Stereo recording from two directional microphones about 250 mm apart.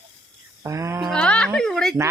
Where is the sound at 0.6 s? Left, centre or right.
Centre.